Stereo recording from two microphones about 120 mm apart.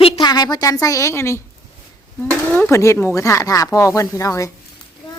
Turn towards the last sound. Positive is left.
turn(degrees=25)  # may be behind; listen again after turning